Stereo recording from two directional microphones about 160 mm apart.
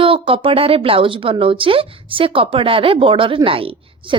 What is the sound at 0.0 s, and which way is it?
Speech, 35° right (ahead or behind).